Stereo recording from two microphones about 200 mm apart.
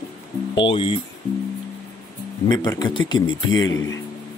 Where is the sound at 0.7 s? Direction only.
25° left (ahead or behind).